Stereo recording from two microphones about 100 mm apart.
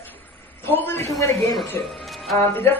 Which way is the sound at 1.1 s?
Centre (ahead or behind).